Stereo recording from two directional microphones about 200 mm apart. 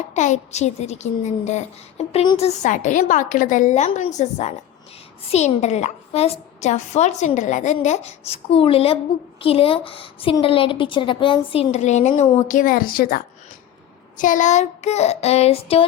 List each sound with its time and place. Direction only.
0.1 s a woman's voice: 35° left (ahead or behind)